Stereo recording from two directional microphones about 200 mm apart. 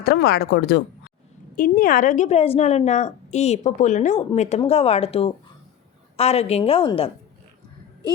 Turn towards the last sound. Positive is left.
turn(degrees=25)  # may be behind; listen again after turning